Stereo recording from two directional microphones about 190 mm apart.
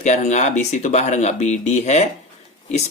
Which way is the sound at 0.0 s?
40° left (ahead or behind).